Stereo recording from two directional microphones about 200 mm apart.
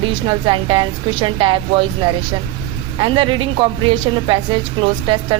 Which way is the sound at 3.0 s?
25° right (ahead or behind).